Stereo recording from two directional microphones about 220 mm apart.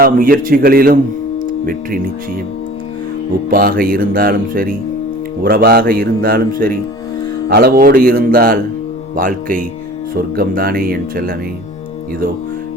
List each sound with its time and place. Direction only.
0.0 s a man's voice: 40° right (ahead or behind)
3.5 s a man's voice: 40° right (ahead or behind)